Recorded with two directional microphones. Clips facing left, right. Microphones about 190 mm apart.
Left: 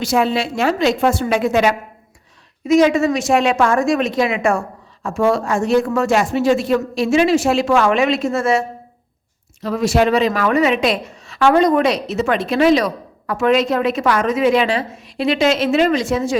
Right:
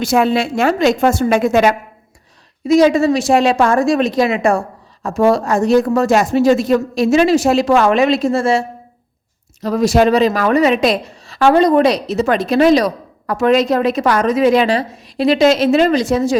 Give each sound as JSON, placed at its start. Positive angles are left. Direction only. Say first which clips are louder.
{"t": 0.0, "sound": "a woman's voice", "louder": "right 3 dB", "side_deg": -50}
{"t": 2.6, "sound": "a woman's voice", "louder": "right 2 dB", "side_deg": -35}